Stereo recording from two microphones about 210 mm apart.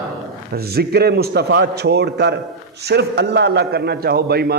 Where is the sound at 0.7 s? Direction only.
50° right (ahead or behind).